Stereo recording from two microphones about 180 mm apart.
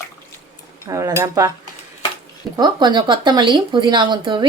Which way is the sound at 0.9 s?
15° right (ahead or behind).